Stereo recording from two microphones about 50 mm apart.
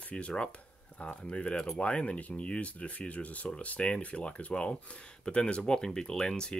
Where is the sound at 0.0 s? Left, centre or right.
Left.